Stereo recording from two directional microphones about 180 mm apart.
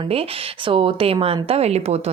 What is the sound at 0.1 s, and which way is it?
Speech, 30° right (ahead or behind).